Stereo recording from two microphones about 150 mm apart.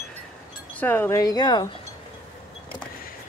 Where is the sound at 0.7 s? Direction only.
10° left (ahead or behind); by 1.7 s 25° left (ahead or behind).